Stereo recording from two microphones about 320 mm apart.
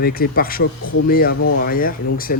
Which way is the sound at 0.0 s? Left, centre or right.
Left.